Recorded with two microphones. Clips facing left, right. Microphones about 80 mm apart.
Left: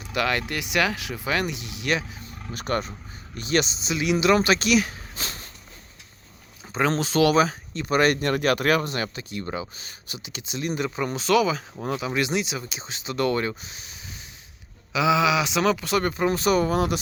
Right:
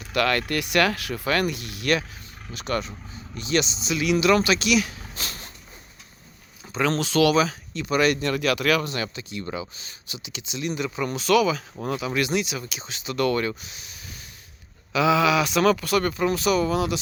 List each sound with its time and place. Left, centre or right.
0.0 s speech: centre
2.2 s roaring cats: left
3.3 s speech: left
3.9 s speech: left
7.0 s speech: left
14.9 s speech: centre; by 17.0 s left